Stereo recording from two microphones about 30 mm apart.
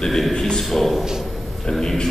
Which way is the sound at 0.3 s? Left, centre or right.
Centre.